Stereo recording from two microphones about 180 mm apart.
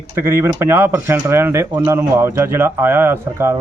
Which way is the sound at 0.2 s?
15° right (ahead or behind).